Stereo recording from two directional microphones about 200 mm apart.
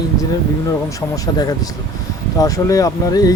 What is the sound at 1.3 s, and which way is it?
Speech, 20° left (ahead or behind).